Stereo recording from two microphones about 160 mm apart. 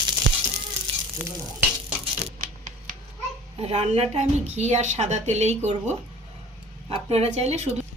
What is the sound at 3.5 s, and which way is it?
A woman's voice, 40° right (ahead or behind).